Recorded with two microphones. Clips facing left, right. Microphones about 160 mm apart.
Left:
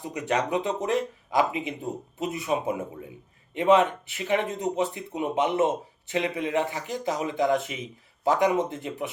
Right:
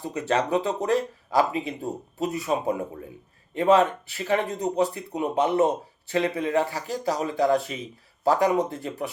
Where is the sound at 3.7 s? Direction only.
20° left (ahead or behind).